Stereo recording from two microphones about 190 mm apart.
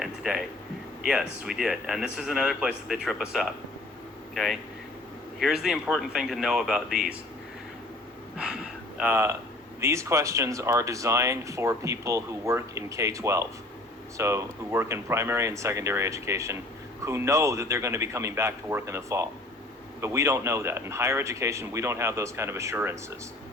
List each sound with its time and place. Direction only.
0.0 s a sound: 5° right (ahead or behind)
1.0 s a man's voice: 5° right (ahead or behind)
5.4 s a man's voice: 5° right (ahead or behind)
8.4 s speech: 5° right (ahead or behind)